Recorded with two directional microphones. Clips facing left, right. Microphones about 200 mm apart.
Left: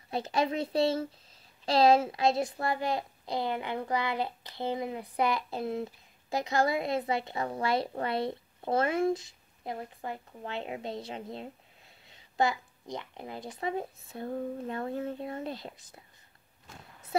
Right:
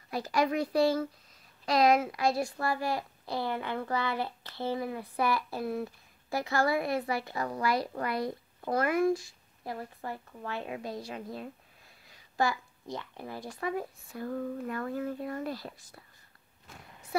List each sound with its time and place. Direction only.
0.1 s a woman's voice: 25° left (ahead or behind)